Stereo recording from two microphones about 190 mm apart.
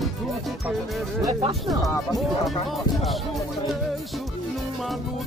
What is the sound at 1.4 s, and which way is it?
Speech, 25° right (ahead or behind).